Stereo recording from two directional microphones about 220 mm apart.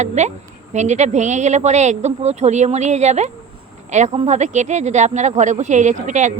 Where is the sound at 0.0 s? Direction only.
30° right (ahead or behind).